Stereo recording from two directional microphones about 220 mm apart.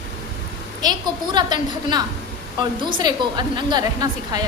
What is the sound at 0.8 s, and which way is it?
A woman's voice, 20° right (ahead or behind).